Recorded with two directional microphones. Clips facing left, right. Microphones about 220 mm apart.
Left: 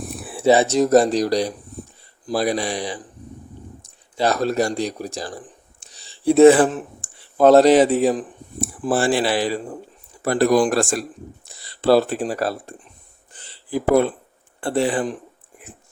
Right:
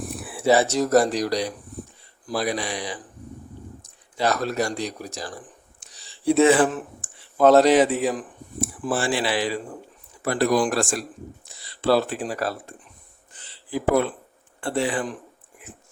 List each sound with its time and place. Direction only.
0.3 s speech: 20° left (ahead or behind)
13.3 s a sound: 35° left (ahead or behind)
14.6 s speech: 35° left (ahead or behind)